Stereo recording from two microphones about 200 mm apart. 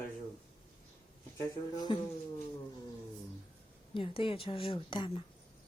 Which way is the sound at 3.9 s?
25° left (ahead or behind).